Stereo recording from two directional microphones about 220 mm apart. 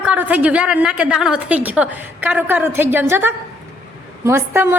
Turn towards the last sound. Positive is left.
turn(degrees=-10)  # may be behind; listen again after turning